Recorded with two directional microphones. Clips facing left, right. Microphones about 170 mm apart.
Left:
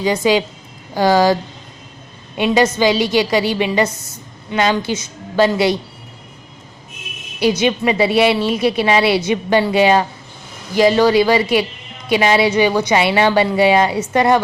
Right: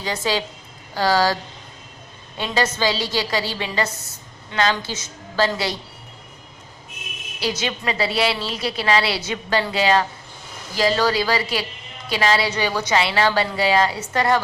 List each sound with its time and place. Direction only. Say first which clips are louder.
0.0 s a woman's voice: left 9 dB; 10° left (ahead or behind)
2.4 s a woman's voice: left 8 dB; 15° left (ahead or behind)
7.6 s a woman's voice: left 9 dB; 20° left (ahead or behind)